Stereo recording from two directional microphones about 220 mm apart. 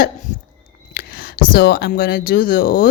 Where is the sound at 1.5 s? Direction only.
45° left (ahead or behind).